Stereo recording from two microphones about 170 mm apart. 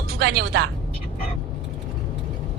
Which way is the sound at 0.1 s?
70° right (ahead or behind).